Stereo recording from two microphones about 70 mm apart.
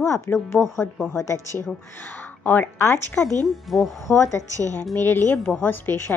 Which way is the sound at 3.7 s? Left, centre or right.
Centre.